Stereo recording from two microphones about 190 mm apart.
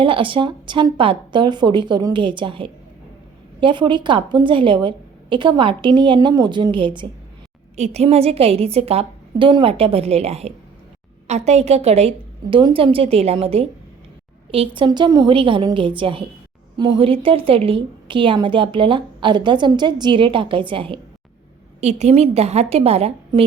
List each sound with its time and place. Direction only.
0.0 s a woman's voice: 25° right (ahead or behind)